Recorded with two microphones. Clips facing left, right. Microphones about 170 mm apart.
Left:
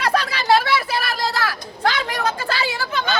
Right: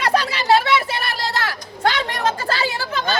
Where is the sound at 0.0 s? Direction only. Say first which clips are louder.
Right 1 dB; 25° right (ahead or behind).